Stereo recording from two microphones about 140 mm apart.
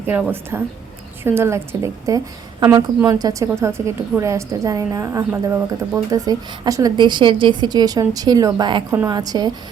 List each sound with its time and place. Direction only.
0.1 s a woman's voice: 15° right (ahead or behind)
5.3 s speech: 15° right (ahead or behind)
6.1 s a woman's voice: 25° right (ahead or behind)